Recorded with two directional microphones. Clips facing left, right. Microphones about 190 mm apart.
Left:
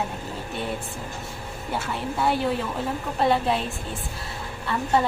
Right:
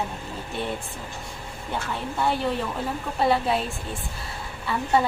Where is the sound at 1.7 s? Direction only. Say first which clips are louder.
Left 1 dB; centre (ahead or behind).